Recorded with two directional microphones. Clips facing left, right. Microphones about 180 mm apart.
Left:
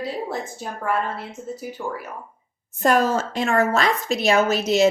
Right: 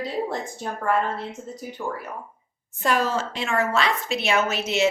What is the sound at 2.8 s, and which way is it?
A woman's voice, 45° left (ahead or behind).